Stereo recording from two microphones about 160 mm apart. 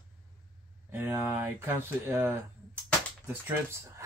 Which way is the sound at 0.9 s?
15° right (ahead or behind).